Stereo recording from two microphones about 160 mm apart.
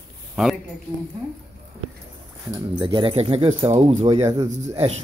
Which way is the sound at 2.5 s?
30° right (ahead or behind).